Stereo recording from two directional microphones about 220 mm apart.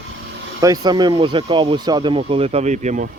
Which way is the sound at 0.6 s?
15° right (ahead or behind).